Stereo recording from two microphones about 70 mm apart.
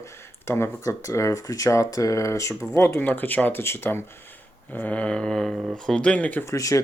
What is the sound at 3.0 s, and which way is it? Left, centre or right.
Speech, left.